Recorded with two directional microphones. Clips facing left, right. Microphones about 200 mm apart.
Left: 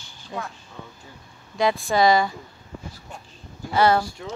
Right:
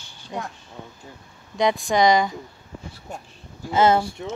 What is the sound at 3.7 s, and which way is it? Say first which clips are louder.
Speech: right 1 dB; 20° right (ahead or behind).